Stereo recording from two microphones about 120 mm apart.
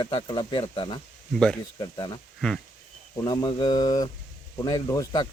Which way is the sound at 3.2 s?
35° left (ahead or behind).